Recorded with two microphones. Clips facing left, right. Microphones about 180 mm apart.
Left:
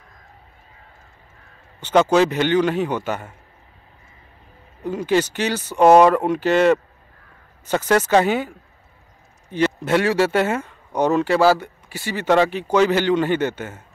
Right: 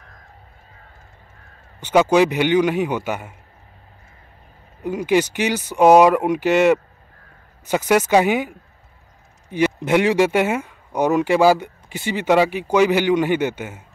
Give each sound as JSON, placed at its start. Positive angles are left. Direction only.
{"t": 1.8, "sound": "speech", "side_deg": -10}
{"t": 4.8, "sound": "speech", "side_deg": -10}